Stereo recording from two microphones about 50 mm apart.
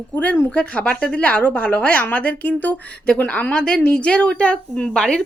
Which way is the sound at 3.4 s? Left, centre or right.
Left.